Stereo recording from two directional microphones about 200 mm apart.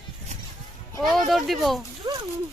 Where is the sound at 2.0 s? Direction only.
20° right (ahead or behind).